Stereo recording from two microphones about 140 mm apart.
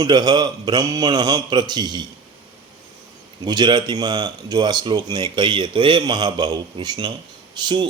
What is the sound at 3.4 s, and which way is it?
Speech, 30° right (ahead or behind).